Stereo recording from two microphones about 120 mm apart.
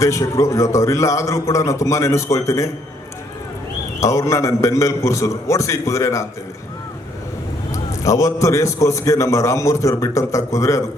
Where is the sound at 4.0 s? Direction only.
25° left (ahead or behind).